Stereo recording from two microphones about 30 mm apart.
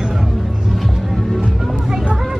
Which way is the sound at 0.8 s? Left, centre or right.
Centre.